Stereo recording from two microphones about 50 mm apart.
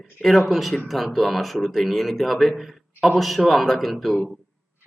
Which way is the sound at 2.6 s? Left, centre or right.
Centre.